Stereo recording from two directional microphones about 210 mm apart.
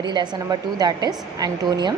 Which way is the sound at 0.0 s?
20° right (ahead or behind).